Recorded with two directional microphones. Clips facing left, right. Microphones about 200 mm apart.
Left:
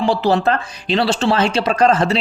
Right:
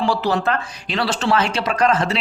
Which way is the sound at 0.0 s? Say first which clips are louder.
Left 4 dB; 25° left (ahead or behind).